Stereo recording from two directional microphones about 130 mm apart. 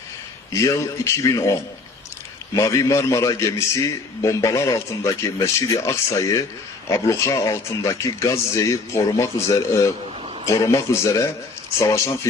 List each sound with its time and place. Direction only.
0.5 s a man's voice: 25° left (ahead or behind)
2.6 s a man's voice: 25° left (ahead or behind)